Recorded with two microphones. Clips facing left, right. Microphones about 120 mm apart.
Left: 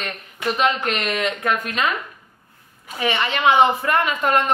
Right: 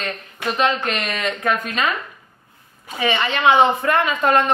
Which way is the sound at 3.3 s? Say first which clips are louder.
Right 1 dB; 10° left (ahead or behind).